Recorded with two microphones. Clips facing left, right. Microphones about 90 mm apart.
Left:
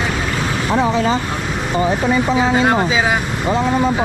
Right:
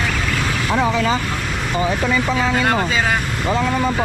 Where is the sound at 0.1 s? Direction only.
15° left (ahead or behind).